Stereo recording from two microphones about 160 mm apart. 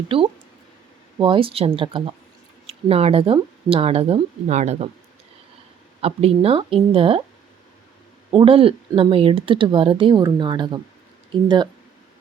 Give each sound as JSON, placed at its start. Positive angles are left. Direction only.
{"t": 1.2, "sound": "speech", "side_deg": -30}
{"t": 6.0, "sound": "speech", "side_deg": -40}
{"t": 8.3, "sound": "speech", "side_deg": -35}